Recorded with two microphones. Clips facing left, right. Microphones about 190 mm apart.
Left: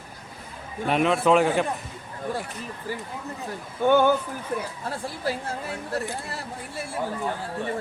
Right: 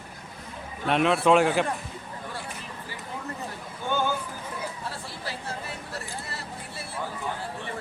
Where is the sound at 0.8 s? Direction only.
Centre (ahead or behind).